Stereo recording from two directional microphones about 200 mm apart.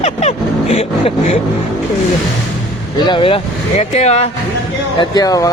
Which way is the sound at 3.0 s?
25° left (ahead or behind).